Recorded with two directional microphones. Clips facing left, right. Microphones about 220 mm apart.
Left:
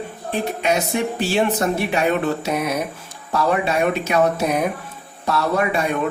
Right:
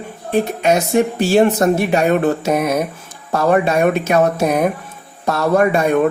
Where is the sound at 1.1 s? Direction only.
45° right (ahead or behind).